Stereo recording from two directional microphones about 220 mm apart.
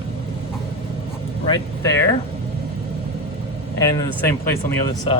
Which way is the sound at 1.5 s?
15° left (ahead or behind).